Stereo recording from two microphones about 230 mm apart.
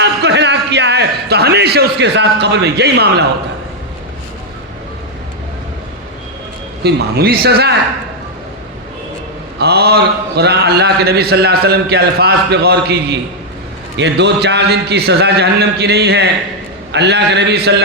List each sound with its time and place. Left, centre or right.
0.0 s a sound: right
6.8 s speech: right
9.6 s speech: right